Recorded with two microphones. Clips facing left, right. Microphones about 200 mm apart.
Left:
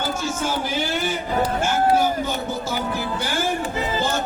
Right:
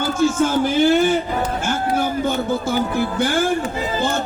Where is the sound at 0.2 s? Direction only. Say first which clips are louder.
Right 8 dB; 55° right (ahead or behind).